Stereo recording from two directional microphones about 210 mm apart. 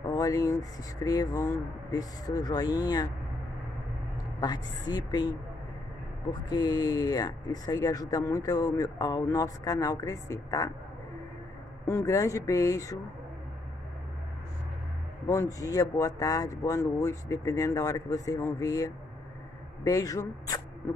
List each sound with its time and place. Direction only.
0.0 s speech: 15° left (ahead or behind)
4.4 s a woman's voice: 20° left (ahead or behind)
6.5 s speech: 20° left (ahead or behind)
11.8 s speech: 10° left (ahead or behind)
15.2 s speech: 15° left (ahead or behind)